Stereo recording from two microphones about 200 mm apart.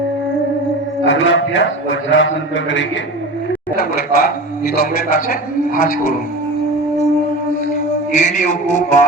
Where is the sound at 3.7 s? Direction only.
50° left (ahead or behind).